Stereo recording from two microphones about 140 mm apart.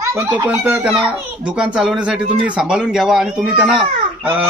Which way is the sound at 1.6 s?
5° right (ahead or behind).